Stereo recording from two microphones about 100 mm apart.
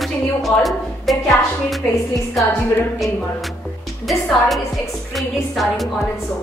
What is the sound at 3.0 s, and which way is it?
A woman's voice, centre (ahead or behind).